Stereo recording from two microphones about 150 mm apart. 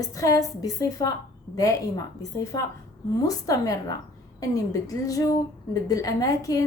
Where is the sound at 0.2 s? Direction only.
25° left (ahead or behind).